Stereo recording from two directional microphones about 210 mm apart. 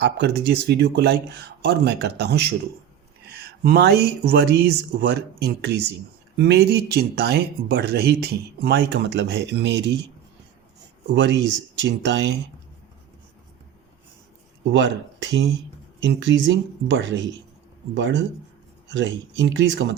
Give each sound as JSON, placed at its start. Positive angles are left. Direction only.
{"t": 0.0, "sound": "speech", "side_deg": -55}
{"t": 11.1, "sound": "speech", "side_deg": -60}
{"t": 14.7, "sound": "speech", "side_deg": -60}